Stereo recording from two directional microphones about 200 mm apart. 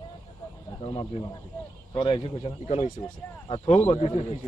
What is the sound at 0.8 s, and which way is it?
Speech, 30° left (ahead or behind).